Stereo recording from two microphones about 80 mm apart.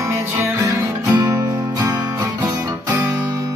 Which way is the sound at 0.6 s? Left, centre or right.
Right.